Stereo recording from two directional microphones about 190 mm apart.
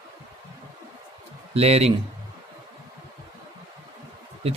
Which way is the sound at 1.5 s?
35° right (ahead or behind).